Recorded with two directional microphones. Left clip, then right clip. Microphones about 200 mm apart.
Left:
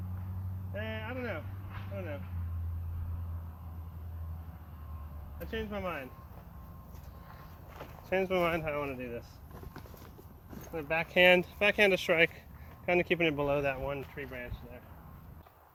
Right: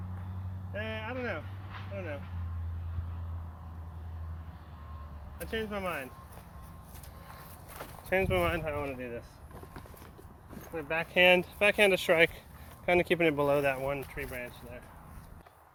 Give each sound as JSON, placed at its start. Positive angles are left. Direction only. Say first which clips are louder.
{"t": 0.7, "sound": "vehicle", "louder": "right 2 dB", "side_deg": -25}
{"t": 2.0, "sound": "speech", "louder": "right 2 dB", "side_deg": -25}
{"t": 5.4, "sound": "speech", "louder": "right 2 dB", "side_deg": -30}
{"t": 7.3, "sound": "a sound", "louder": "right 3 dB", "side_deg": -35}
{"t": 8.1, "sound": "speech", "louder": "right 1 dB", "side_deg": -5}
{"t": 8.5, "sound": "speech", "louder": "even", "side_deg": 15}
{"t": 10.8, "sound": "speech", "louder": "even", "side_deg": 25}
{"t": 11.6, "sound": "speech", "louder": "right 1 dB", "side_deg": 0}